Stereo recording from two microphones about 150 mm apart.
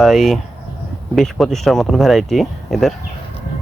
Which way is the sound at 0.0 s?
Centre (ahead or behind).